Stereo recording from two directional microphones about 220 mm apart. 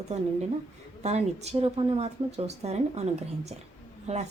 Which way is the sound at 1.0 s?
30° right (ahead or behind).